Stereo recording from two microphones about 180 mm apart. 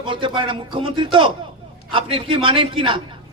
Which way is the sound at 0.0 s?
25° right (ahead or behind).